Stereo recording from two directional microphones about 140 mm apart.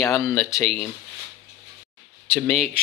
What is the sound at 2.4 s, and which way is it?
Speech, centre (ahead or behind).